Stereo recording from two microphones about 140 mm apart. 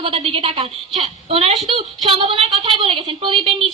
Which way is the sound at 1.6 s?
40° right (ahead or behind).